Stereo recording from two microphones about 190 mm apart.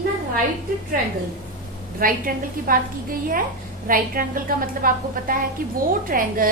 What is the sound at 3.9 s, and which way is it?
A woman's voice, 50° right (ahead or behind).